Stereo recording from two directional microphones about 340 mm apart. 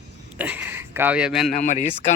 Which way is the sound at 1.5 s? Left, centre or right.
Left.